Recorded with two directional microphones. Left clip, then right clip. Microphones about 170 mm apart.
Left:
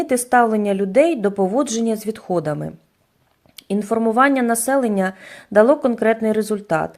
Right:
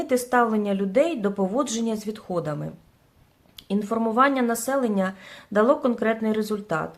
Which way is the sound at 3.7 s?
30° left (ahead or behind).